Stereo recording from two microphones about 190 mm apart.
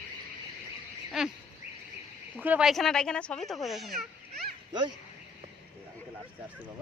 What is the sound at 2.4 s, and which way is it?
Speech, 5° right (ahead or behind).